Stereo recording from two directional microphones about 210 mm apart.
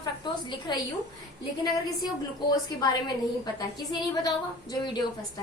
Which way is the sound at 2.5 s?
20° left (ahead or behind).